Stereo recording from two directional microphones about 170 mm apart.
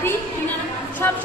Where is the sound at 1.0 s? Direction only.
10° left (ahead or behind).